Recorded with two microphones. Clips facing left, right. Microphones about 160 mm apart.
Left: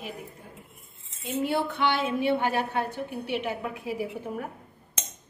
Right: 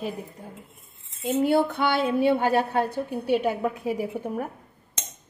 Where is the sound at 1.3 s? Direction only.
40° right (ahead or behind).